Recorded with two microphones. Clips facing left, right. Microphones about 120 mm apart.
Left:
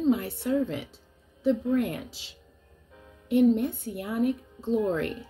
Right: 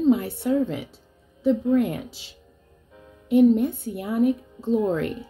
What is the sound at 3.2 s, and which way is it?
A woman's voice, 20° right (ahead or behind).